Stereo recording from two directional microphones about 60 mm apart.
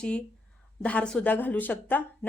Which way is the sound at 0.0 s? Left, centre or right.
Centre.